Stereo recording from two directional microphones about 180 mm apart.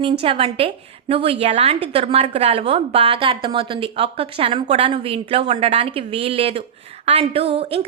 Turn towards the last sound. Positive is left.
turn(degrees=-30)  # may be behind; listen again after turning